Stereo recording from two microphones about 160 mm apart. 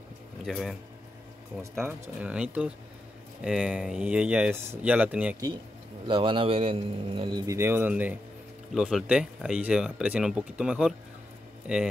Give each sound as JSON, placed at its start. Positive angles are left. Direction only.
{"t": 0.5, "sound": "speech", "side_deg": 0}
{"t": 1.6, "sound": "speech", "side_deg": -15}
{"t": 6.0, "sound": "a man's voice", "side_deg": -30}